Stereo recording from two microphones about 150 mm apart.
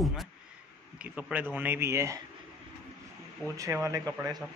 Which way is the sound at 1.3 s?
10° right (ahead or behind).